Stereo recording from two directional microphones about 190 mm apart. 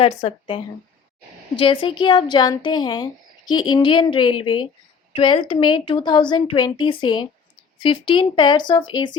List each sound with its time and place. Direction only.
0.0 s speech: 30° left (ahead or behind)